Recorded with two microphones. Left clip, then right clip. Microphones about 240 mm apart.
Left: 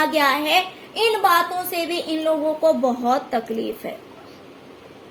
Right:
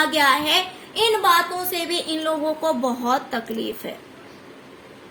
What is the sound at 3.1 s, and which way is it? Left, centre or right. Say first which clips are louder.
Speech: even; centre.